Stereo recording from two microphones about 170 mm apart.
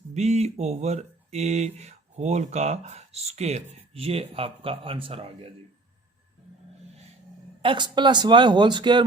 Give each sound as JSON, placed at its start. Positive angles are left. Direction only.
{"t": 0.1, "sound": "speech", "side_deg": -40}
{"t": 7.6, "sound": "speech", "side_deg": -30}